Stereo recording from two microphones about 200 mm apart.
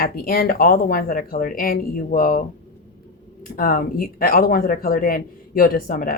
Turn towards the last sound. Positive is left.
turn(degrees=45)  # may be behind; listen again after turning